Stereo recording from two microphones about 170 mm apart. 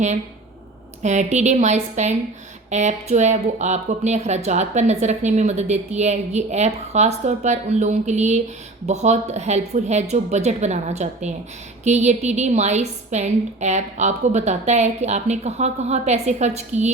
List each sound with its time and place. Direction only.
1.0 s speech: 45° right (ahead or behind)